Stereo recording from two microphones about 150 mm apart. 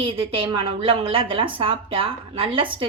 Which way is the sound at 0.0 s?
35° right (ahead or behind).